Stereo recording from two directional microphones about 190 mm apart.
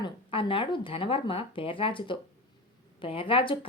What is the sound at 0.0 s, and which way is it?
A woman's voice, 30° left (ahead or behind).